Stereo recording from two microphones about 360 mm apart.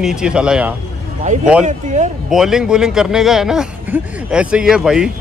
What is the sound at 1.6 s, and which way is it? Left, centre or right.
Speech, centre.